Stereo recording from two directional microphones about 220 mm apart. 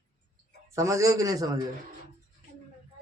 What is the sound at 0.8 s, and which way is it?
Speech, 15° right (ahead or behind).